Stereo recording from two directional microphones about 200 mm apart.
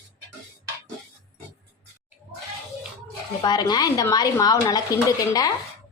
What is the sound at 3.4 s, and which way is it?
Speech, 20° left (ahead or behind).